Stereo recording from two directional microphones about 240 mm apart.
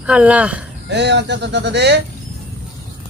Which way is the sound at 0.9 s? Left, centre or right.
Right.